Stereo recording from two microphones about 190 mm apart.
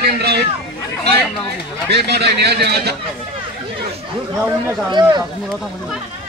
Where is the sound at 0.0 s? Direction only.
60° right (ahead or behind).